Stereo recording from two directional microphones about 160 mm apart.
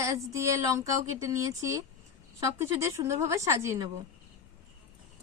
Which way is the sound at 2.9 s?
20° right (ahead or behind).